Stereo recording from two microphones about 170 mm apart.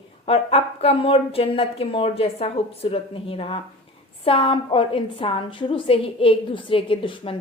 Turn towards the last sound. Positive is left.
turn(degrees=30)  # may be behind; listen again after turning